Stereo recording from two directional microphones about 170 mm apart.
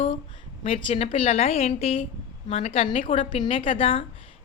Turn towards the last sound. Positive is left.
turn(degrees=30)  # may be behind; listen again after turning